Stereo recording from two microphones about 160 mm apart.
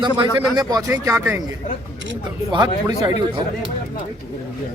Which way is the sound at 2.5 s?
25° right (ahead or behind).